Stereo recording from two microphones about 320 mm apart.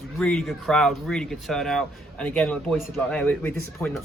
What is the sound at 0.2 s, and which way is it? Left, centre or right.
Speech, centre.